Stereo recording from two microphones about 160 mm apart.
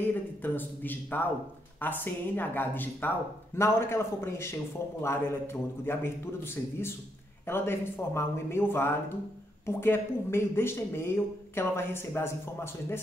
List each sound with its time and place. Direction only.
0.0 s speech: 10° left (ahead or behind)